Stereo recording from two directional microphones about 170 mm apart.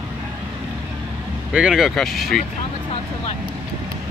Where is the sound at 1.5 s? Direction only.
5° right (ahead or behind).